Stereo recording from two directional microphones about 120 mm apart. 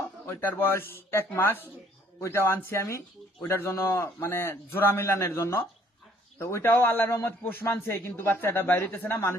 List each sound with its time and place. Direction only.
0.3 s a man's voice: 20° left (ahead or behind)